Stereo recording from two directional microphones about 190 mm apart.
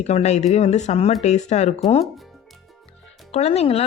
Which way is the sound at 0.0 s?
35° left (ahead or behind).